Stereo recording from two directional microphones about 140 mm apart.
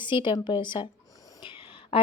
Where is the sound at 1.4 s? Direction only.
40° left (ahead or behind).